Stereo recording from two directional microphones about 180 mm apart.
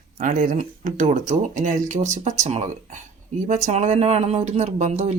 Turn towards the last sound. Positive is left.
turn(degrees=-40)  # may be behind; listen again after turning